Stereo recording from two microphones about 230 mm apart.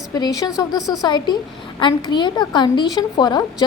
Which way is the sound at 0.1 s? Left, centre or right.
Centre.